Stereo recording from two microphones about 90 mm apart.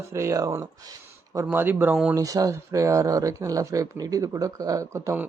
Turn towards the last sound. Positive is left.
turn(degrees=-35)  # may be behind; listen again after turning